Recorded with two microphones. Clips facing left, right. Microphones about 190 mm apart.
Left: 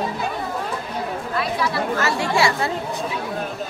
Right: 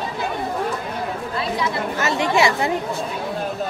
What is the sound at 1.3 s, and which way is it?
Speech, 20° right (ahead or behind).